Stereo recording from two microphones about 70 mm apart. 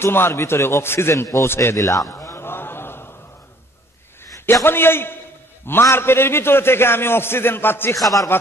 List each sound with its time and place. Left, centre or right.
0.0 s a man's voice: left
1.8 s a sound: left
4.6 s a man's voice: left